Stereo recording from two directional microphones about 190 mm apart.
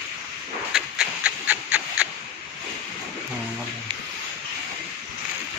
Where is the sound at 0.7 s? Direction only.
5° right (ahead or behind).